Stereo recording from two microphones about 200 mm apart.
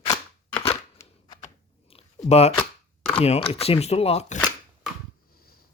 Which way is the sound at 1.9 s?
30° left (ahead or behind).